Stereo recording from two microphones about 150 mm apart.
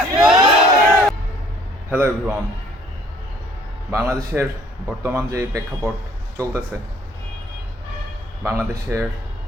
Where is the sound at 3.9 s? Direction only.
20° right (ahead or behind).